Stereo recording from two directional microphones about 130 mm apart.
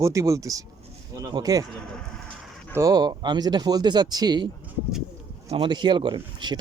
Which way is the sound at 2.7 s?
30° right (ahead or behind).